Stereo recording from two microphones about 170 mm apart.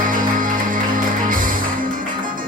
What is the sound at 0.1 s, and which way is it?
Music, 50° right (ahead or behind).